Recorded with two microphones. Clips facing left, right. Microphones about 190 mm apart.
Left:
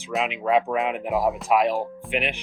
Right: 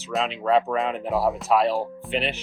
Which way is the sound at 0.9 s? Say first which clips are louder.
Even; 15° left (ahead or behind).